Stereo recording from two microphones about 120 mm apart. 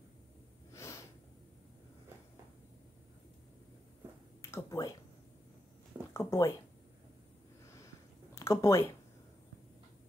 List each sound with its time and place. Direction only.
0.7 s snort: 25° left (ahead or behind)
4.4 s a sound: 25° left (ahead or behind)
6.1 s speech: 20° left (ahead or behind)
8.4 s speech: 25° left (ahead or behind)